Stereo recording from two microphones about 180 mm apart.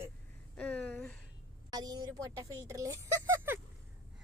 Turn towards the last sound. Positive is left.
turn(degrees=-15)  # may be behind; listen again after turning